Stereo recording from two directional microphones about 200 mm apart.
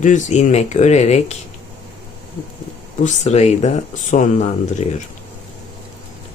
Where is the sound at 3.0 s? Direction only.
35° left (ahead or behind).